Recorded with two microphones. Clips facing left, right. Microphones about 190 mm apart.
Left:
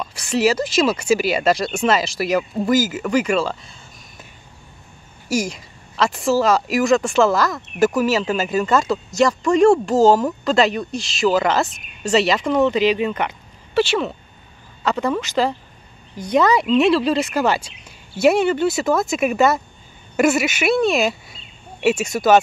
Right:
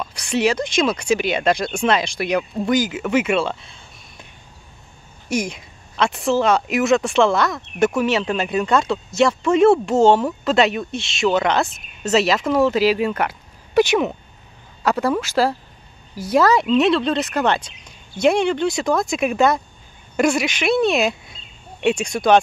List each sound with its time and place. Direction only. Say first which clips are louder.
0.0 s speech: left 1 dB; centre (ahead or behind)
5.3 s speech: left 1 dB; centre (ahead or behind)
13.7 s speech: right 3 dB; 15° right (ahead or behind); by 22.4 s 5° left (ahead or behind)